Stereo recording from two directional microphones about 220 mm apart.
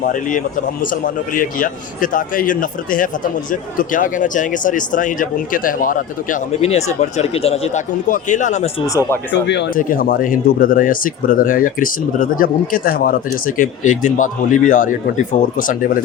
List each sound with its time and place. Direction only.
0.0 s speech: 35° left (ahead or behind)
9.3 s speech: 50° left (ahead or behind)